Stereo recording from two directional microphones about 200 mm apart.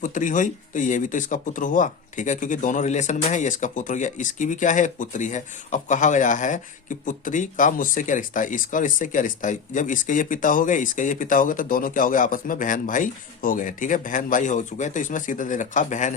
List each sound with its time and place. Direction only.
0.0 s speech: 40° left (ahead or behind)